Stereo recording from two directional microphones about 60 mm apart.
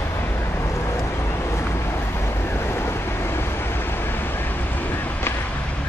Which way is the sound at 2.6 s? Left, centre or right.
Left.